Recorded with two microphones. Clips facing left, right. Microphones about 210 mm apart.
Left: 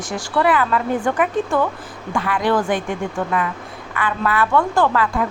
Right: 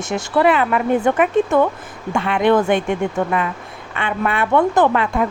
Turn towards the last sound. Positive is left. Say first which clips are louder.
# right 2 dB
turn(degrees=-20)  # may be behind; listen again after turning